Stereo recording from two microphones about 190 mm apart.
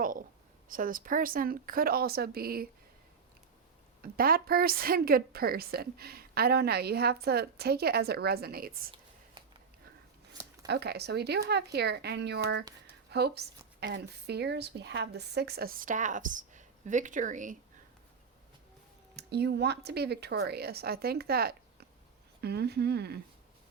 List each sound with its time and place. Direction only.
0.0 s a sound: 45° right (ahead or behind)
0.7 s speech: 45° right (ahead or behind)
4.0 s a woman's voice: 50° right (ahead or behind)
10.7 s a woman's voice: 60° right (ahead or behind); by 17.6 s 40° right (ahead or behind)
19.1 s a woman's voice: 60° right (ahead or behind)